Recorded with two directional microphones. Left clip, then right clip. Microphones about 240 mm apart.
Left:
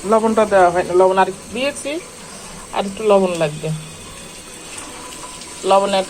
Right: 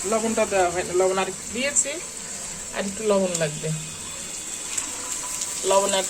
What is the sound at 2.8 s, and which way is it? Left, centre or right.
Speech, centre.